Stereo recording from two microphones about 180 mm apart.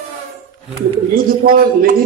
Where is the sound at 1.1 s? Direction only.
55° right (ahead or behind).